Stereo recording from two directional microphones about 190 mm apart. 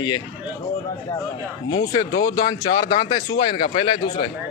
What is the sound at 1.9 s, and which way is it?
Speech, 20° left (ahead or behind).